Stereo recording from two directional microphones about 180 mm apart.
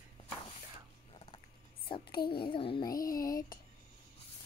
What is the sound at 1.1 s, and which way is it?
Rodents, 30° left (ahead or behind).